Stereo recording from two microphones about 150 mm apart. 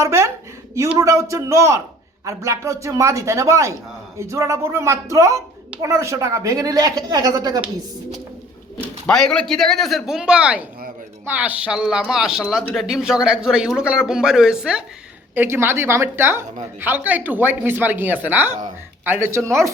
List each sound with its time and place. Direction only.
0.0 s speech: 20° right (ahead or behind)
9.0 s speech: 5° left (ahead or behind)
15.4 s speech: 15° right (ahead or behind)